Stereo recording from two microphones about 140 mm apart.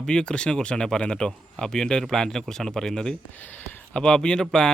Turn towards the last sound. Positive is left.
turn(degrees=5)  # may be behind; listen again after turning